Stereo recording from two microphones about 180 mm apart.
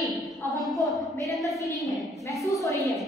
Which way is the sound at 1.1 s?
20° left (ahead or behind).